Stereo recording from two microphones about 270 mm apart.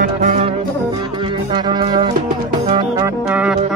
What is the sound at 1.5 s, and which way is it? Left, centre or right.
Music, centre.